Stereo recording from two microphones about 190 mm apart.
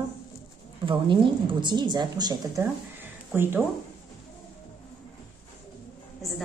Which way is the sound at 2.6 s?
10° right (ahead or behind).